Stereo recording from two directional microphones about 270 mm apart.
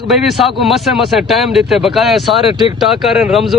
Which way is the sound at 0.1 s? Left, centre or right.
Centre.